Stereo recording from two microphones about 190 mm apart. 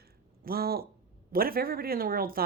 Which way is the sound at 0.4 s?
50° right (ahead or behind).